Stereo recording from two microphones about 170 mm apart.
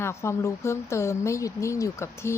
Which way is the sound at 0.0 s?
15° left (ahead or behind).